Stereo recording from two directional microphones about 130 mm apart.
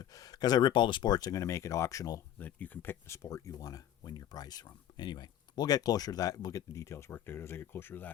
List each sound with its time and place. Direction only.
0.0 s speech: 25° left (ahead or behind)
2.4 s speech: 15° left (ahead or behind)